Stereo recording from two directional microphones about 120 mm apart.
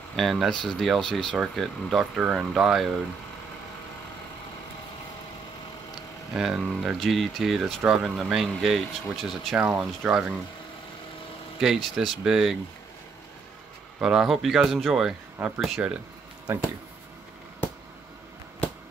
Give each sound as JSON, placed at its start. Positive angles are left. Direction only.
{"t": 0.1, "sound": "speech", "side_deg": 0}
{"t": 6.3, "sound": "speech", "side_deg": -5}
{"t": 9.6, "sound": "speech", "side_deg": -10}
{"t": 11.6, "sound": "speech", "side_deg": 0}
{"t": 13.9, "sound": "speech", "side_deg": -5}
{"t": 15.3, "sound": "speech", "side_deg": -15}